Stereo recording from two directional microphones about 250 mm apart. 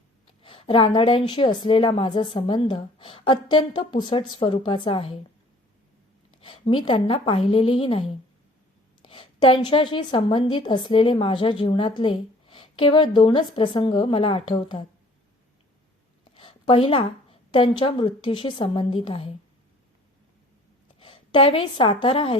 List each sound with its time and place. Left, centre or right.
0.4 s a woman's voice: left
6.4 s a sound: left
6.8 s a woman's voice: centre
16.3 s a woman's voice: left
21.0 s a woman's voice: left